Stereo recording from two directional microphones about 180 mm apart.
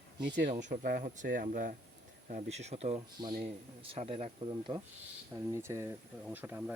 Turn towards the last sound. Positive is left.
turn(degrees=-10)  # may be behind; listen again after turning